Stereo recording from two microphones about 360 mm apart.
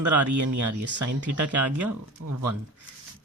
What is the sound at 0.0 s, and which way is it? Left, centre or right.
Speech, right.